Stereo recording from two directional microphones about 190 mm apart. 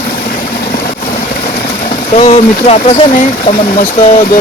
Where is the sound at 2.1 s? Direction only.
35° left (ahead or behind).